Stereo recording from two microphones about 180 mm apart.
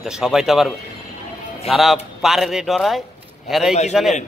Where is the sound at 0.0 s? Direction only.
Centre (ahead or behind).